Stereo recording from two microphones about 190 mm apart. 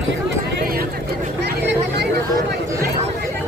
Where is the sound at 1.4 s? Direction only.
60° right (ahead or behind).